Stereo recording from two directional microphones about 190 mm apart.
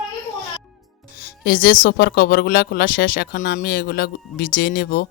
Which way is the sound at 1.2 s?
55° left (ahead or behind).